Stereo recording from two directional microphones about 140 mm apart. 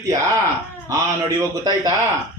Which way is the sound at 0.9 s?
25° right (ahead or behind).